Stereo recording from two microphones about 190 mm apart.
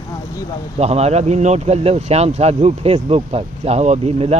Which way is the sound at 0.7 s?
35° right (ahead or behind).